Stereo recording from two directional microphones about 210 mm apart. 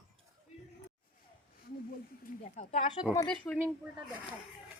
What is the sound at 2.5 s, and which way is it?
Speech, 30° left (ahead or behind).